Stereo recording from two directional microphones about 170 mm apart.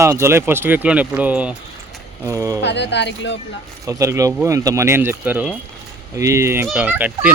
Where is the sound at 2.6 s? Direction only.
90° left.